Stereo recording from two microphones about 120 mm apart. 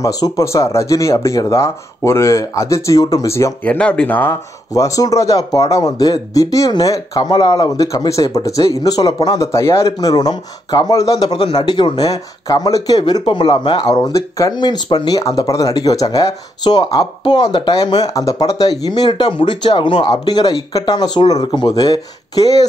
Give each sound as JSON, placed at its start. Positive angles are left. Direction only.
{"t": 0.0, "sound": "speech", "side_deg": 25}
{"t": 3.6, "sound": "speech", "side_deg": 10}
{"t": 4.7, "sound": "speech", "side_deg": 30}
{"t": 11.3, "sound": "speech", "side_deg": 45}